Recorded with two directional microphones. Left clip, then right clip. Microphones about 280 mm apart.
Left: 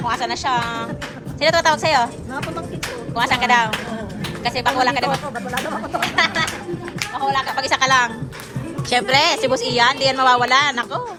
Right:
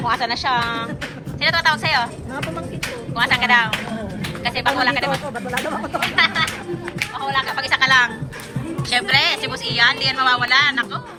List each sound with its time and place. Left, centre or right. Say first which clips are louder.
0.0 s a woman's voice: right 1 dB; centre
1.4 s speech: left 2 dB; left
3.2 s a woman's voice: even; left
5.5 s speech: right 1 dB; centre
6.1 s speech: right 2 dB; left